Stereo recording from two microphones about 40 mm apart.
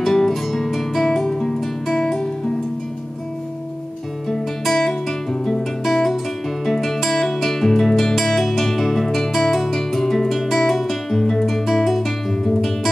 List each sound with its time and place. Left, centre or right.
0.0 s music: centre
4.3 s guitar: centre
6.6 s music: centre
11.1 s guitar: centre